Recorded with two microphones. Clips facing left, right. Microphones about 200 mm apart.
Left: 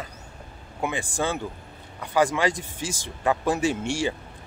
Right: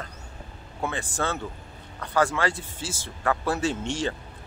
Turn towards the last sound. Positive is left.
turn(degrees=10)  # may be behind; listen again after turning